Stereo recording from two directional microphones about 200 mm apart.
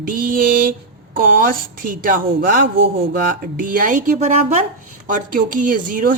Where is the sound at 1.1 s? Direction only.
45° right (ahead or behind).